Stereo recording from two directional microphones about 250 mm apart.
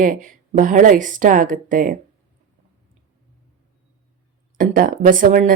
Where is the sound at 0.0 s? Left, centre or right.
Right.